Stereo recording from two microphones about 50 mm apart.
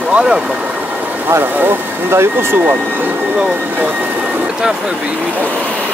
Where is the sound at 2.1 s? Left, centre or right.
Right.